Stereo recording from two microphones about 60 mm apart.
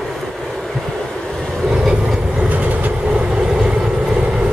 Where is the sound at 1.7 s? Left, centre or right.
Centre.